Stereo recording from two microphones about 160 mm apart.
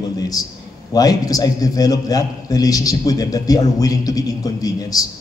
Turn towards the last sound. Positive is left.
turn(degrees=20)  # may be behind; listen again after turning